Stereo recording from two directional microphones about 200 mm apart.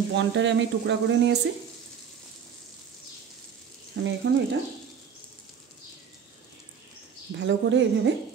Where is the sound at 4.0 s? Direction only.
60° right (ahead or behind).